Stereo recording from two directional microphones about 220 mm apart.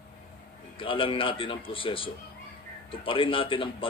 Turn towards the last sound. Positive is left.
turn(degrees=25)  # may be behind; listen again after turning